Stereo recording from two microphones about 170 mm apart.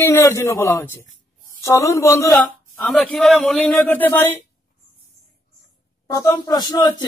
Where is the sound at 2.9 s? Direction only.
5° left (ahead or behind).